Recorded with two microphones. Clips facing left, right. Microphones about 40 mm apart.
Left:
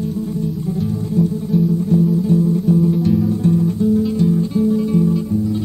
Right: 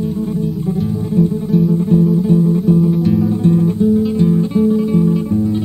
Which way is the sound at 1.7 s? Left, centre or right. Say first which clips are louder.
Right 3 dB; right.